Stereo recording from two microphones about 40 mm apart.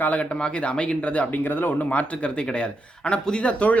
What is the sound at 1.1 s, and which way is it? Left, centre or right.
Speech, left.